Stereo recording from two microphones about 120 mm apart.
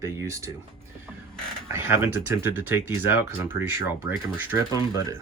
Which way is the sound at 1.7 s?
20° right (ahead or behind).